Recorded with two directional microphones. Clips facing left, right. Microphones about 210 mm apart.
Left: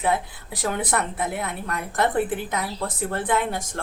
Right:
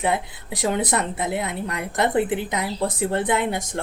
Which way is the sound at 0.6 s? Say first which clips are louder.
Right 3 dB; 20° right (ahead or behind).